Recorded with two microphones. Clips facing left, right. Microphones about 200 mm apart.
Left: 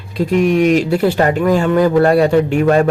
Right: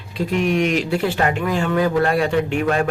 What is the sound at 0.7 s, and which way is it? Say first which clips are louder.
A man's voice: left 7 dB; 40° left (ahead or behind).